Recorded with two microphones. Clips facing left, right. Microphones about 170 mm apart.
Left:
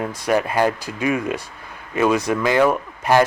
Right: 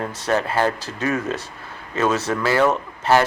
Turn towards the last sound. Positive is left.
turn(degrees=15)  # may be behind; listen again after turning